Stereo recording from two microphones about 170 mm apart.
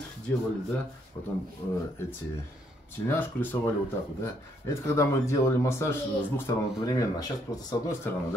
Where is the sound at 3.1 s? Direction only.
10° left (ahead or behind).